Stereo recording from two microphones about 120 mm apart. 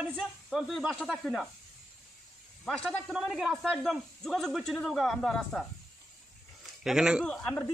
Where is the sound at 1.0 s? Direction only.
5° right (ahead or behind).